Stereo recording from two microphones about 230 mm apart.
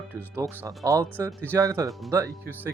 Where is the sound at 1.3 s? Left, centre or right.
Centre.